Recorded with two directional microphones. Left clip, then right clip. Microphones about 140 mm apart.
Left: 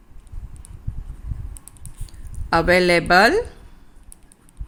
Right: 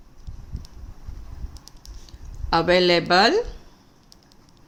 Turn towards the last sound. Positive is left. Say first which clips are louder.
# left 3 dB
turn(degrees=25)  # may be behind; listen again after turning